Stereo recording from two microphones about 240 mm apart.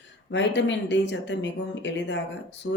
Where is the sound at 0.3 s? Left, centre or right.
Left.